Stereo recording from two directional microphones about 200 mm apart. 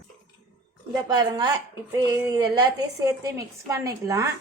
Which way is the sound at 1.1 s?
20° right (ahead or behind).